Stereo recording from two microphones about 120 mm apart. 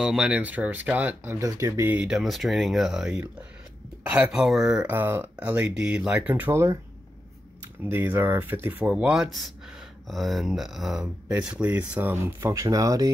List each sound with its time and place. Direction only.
0.0 s speech: 5° right (ahead or behind); by 2.0 s 25° right (ahead or behind)
2.0 s speech: 5° right (ahead or behind)
4.9 s speech: 20° right (ahead or behind)
7.8 s speech: 15° right (ahead or behind)